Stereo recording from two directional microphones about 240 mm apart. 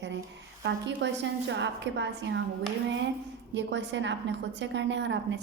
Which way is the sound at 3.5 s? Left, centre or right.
Right.